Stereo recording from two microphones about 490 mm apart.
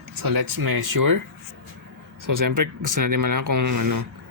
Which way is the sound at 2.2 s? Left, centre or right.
Right.